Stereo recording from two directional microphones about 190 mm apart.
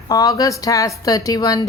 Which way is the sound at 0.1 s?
20° left (ahead or behind).